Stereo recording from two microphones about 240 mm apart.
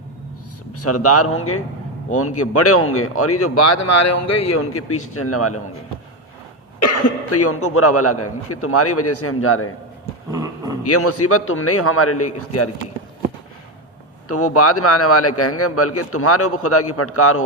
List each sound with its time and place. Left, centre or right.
0.7 s speech: left
6.7 s speech: left
10.3 s a sound: centre
10.8 s speech: left
14.3 s speech: left